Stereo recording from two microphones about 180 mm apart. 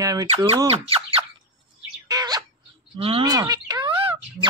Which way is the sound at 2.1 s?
20° right (ahead or behind).